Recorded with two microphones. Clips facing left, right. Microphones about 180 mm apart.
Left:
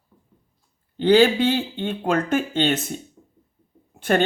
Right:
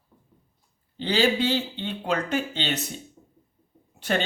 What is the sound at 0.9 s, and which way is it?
Speech, 55° left (ahead or behind).